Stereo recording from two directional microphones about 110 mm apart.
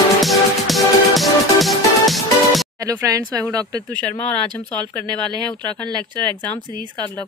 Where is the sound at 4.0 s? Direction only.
15° left (ahead or behind).